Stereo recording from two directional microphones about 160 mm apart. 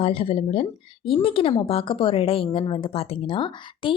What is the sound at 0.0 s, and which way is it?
Speech, 35° left (ahead or behind).